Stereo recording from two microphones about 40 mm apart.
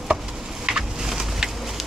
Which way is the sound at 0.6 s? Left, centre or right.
Centre.